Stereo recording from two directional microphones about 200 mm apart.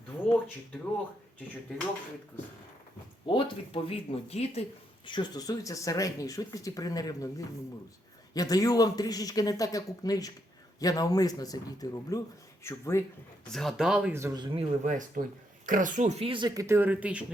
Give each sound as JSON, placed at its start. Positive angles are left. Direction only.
{"t": 3.2, "sound": "a man's voice", "side_deg": 25}
{"t": 13.5, "sound": "speech", "side_deg": 0}
{"t": 14.8, "sound": "speech", "side_deg": -40}